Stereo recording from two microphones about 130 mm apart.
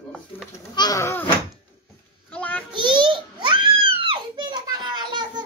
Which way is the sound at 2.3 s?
10° left (ahead or behind).